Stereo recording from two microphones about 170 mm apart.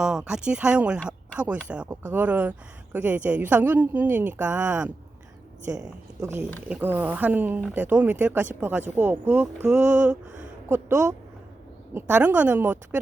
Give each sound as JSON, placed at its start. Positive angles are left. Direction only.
{"t": 0.0, "sound": "speech", "side_deg": -5}
{"t": 5.7, "sound": "a woman's voice", "side_deg": -20}